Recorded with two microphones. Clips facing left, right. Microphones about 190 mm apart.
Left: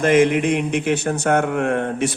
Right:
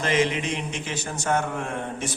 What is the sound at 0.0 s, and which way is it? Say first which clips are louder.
Speech: left 9 dB; 55° left (ahead or behind).